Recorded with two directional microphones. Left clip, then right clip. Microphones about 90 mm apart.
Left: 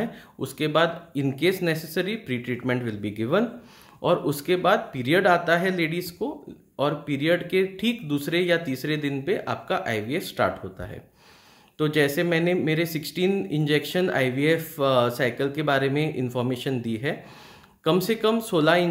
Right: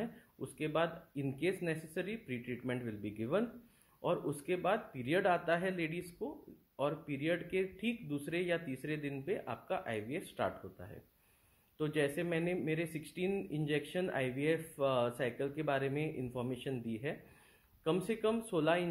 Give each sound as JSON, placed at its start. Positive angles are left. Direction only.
{"t": 0.4, "sound": "speech", "side_deg": 30}